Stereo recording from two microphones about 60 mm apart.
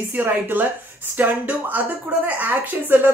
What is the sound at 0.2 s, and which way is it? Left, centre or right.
Speech, right.